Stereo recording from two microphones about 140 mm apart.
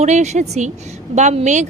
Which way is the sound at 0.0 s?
55° right (ahead or behind).